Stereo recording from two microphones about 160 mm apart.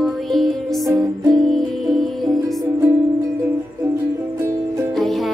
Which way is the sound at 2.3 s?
25° right (ahead or behind).